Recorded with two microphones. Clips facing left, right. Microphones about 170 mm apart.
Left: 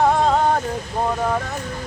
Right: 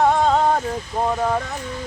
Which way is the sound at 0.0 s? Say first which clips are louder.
Even; centre (ahead or behind).